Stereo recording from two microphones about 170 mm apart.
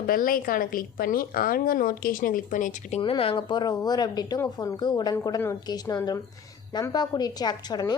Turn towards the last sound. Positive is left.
turn(degrees=25)  # may be behind; listen again after turning